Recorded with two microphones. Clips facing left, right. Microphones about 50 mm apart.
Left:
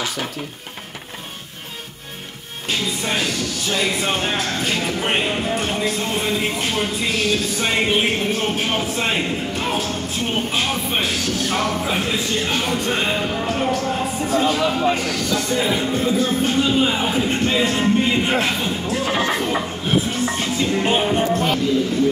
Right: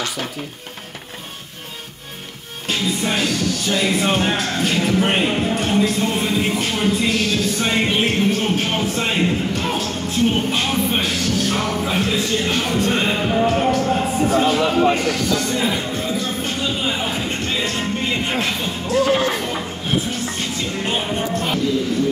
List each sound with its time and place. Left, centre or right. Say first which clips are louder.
2.7 s music: right 2 dB; centre
3.7 s speech: right 2 dB; centre
15.3 s speech: even; centre